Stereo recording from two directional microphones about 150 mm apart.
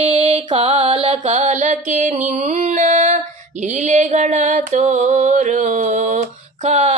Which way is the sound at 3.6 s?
55° right (ahead or behind).